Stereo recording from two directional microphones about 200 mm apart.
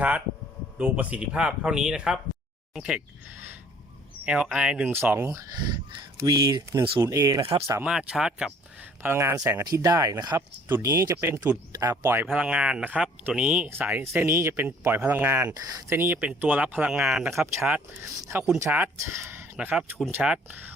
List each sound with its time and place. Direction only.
0.8 s speech: 10° right (ahead or behind)
7.8 s speech: 5° right (ahead or behind)